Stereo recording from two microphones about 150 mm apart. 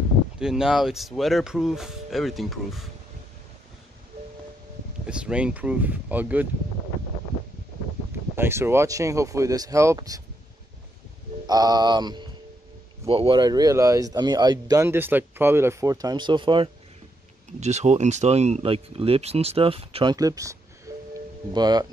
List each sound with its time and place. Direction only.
0.4 s speech: 5° right (ahead or behind)
5.0 s speech: 5° right (ahead or behind)
8.4 s speech: 15° right (ahead or behind)
11.4 s speech: 25° right (ahead or behind)
17.5 s speech: 50° right (ahead or behind); by 21.8 s 25° right (ahead or behind)